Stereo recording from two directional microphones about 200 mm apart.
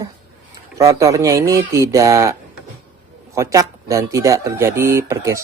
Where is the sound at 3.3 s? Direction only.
15° right (ahead or behind).